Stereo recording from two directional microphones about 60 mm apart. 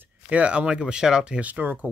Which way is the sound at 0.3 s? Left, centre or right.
Right.